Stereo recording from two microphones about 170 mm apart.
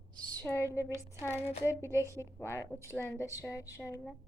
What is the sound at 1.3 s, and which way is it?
Speech, 40° left (ahead or behind).